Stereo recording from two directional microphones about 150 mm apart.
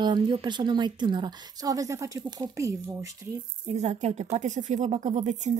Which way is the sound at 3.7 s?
50° right (ahead or behind).